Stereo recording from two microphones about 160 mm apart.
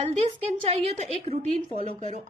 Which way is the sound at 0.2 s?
40° right (ahead or behind).